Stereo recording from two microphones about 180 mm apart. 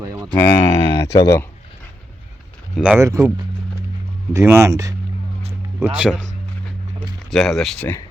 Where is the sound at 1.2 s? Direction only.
15° left (ahead or behind).